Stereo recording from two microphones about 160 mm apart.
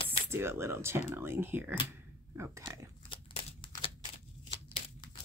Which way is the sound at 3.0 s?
35° left (ahead or behind).